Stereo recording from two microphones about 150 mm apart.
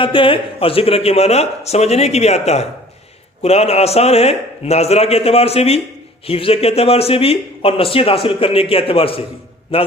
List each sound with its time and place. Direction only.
0.0 s a man's voice: 35° left (ahead or behind)